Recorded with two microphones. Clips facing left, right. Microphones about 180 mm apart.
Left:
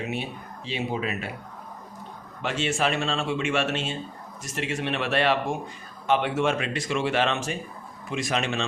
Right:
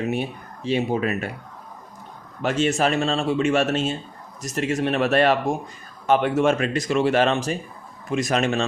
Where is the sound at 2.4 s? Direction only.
45° right (ahead or behind).